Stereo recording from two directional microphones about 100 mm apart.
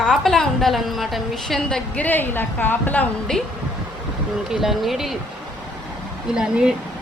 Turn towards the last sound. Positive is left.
turn(degrees=-5)  # may be behind; listen again after turning